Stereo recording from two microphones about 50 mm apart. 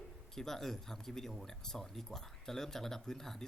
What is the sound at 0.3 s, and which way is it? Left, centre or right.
Speech, centre.